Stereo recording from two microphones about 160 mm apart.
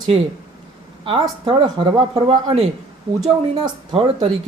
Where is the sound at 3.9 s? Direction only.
35° right (ahead or behind).